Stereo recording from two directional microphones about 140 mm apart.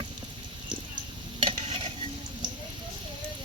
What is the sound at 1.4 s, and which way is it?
Stir, 45° right (ahead or behind).